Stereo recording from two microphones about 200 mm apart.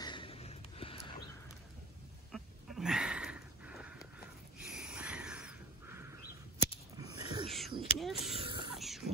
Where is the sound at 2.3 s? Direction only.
Centre (ahead or behind); by 8.7 s 25° right (ahead or behind).